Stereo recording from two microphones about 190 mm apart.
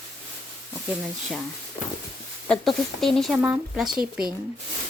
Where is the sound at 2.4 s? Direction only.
Centre (ahead or behind).